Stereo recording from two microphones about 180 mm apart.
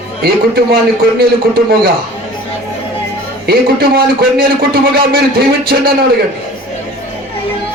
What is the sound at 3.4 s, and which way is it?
A man's voice, 60° right (ahead or behind).